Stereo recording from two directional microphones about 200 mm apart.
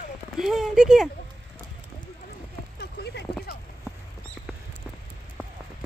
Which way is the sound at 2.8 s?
55° left (ahead or behind).